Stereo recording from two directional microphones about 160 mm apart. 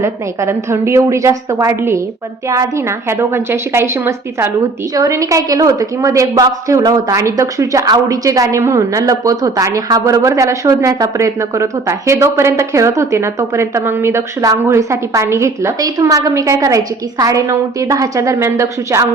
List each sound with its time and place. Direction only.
0.0 s a woman's voice: 15° right (ahead or behind)